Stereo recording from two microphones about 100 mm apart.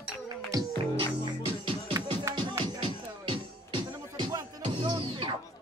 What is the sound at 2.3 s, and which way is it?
Music, 30° right (ahead or behind).